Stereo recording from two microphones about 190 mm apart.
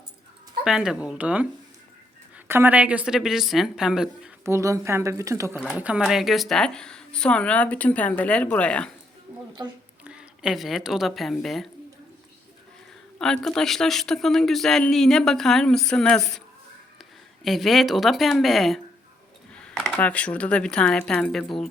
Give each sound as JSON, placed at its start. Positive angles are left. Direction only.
{"t": 0.6, "sound": "speech", "side_deg": -5}
{"t": 2.5, "sound": "speech", "side_deg": -10}
{"t": 4.4, "sound": "speech", "side_deg": -15}
{"t": 10.0, "sound": "a woman's voice", "side_deg": -5}
{"t": 13.1, "sound": "speech", "side_deg": 5}
{"t": 17.4, "sound": "speech", "side_deg": 0}